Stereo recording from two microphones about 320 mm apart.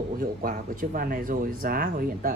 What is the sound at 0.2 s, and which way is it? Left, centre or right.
Speech, right.